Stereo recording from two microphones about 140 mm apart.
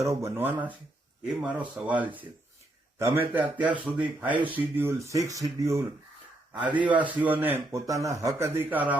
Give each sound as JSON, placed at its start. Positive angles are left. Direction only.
{"t": 0.0, "sound": "speech", "side_deg": -20}
{"t": 1.3, "sound": "a man's voice", "side_deg": -5}
{"t": 3.0, "sound": "a man's voice", "side_deg": -15}
{"t": 6.5, "sound": "a man's voice", "side_deg": -10}